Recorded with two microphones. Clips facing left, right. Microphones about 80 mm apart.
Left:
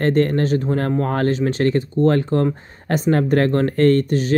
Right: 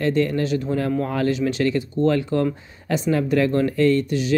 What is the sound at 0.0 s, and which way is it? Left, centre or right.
Speech, left.